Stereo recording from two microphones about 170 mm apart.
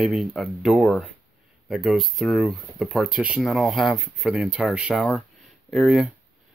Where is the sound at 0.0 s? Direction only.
Centre (ahead or behind).